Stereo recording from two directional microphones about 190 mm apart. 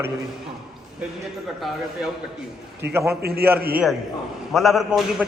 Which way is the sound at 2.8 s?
60° right (ahead or behind).